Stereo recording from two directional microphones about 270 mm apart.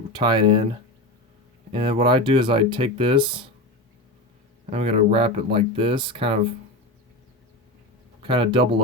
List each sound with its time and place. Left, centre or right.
0.1 s speech: centre
1.7 s speech: centre
4.7 s speech: right
8.2 s speech: centre